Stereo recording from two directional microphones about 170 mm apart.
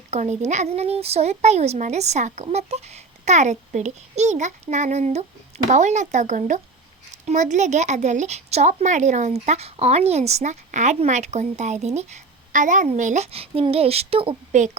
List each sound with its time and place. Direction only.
0.1 s a woman's voice: 40° right (ahead or behind)